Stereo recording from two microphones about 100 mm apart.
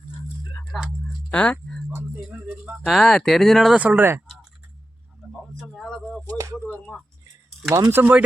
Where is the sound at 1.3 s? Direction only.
10° left (ahead or behind).